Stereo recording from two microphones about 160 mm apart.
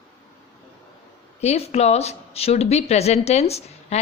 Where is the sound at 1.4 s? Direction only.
40° left (ahead or behind).